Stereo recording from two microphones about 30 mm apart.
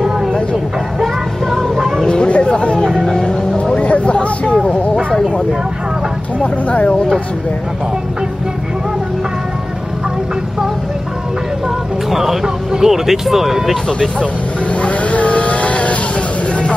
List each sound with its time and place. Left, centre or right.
1.8 s a sound: centre
2.2 s chatter: left
3.7 s a sound: left
6.4 s speech: left
12.1 s speech: centre
14.9 s vehicle: left